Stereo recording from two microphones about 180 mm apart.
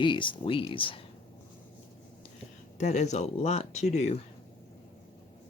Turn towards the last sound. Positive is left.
turn(degrees=40)  # may be behind; listen again after turning